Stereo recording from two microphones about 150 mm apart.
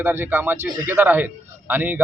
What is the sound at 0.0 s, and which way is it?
Speech, 15° right (ahead or behind).